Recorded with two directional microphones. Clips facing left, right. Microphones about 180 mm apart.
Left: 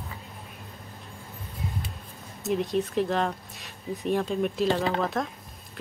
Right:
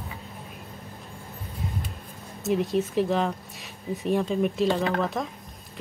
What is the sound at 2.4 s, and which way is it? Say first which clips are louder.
Speech: right 2 dB; centre (ahead or behind).